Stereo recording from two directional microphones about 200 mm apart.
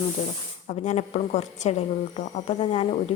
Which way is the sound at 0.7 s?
35° left (ahead or behind).